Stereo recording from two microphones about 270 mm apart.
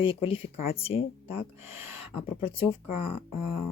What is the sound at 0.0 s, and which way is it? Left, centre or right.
Speech, centre.